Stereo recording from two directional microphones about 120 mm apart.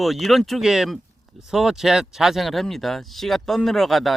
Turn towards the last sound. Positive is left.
turn(degrees=0)  # may be behind; listen again after turning